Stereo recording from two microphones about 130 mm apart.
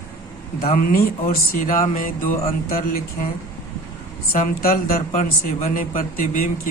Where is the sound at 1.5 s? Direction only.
90° left.